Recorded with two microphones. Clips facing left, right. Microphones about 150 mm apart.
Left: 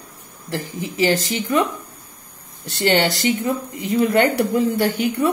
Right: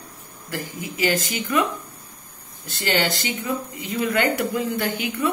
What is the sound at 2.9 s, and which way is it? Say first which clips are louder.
Speech: left 4 dB; 35° left (ahead or behind).